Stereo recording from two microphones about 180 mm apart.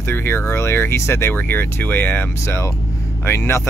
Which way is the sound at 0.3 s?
15° left (ahead or behind).